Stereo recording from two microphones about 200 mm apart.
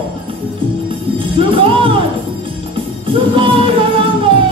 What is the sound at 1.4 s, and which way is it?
Music, 25° right (ahead or behind).